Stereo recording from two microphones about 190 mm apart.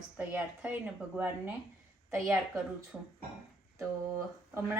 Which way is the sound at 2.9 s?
5° right (ahead or behind).